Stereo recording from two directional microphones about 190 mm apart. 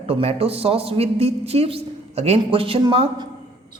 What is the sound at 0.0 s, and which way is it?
A man's voice, 30° right (ahead or behind).